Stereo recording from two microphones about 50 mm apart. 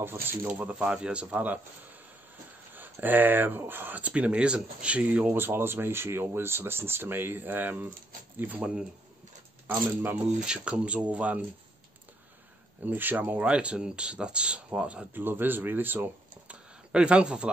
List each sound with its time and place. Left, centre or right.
0.0 s speech: right
0.6 s speech: right
2.7 s speech: right
4.0 s speech: right
5.3 s speech: right
10.4 s speech: centre
12.8 s speech: right
13.4 s speech: right
15.1 s speech: right
16.4 s a sound: right